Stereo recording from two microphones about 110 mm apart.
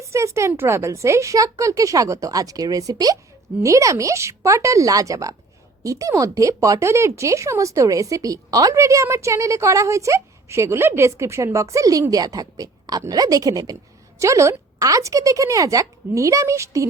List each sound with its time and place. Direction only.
0.0 s a woman's voice: 25° right (ahead or behind)